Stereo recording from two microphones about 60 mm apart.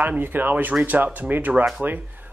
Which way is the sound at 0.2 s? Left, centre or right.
Right.